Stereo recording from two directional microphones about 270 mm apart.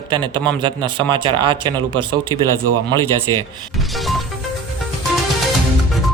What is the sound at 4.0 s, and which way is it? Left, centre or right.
Music, centre.